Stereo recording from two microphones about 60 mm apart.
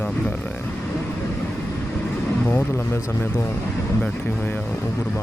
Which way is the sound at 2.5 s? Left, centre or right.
Left.